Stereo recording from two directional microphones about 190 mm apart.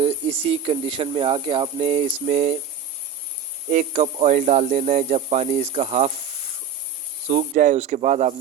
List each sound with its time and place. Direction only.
0.0 s speech: 30° right (ahead or behind)
3.7 s speech: 40° right (ahead or behind)
7.3 s speech: 40° right (ahead or behind)